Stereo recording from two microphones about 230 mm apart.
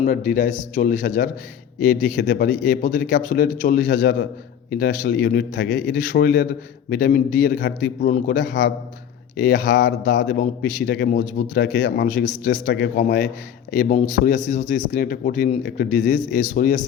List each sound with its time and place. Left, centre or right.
0.0 s a man's voice: left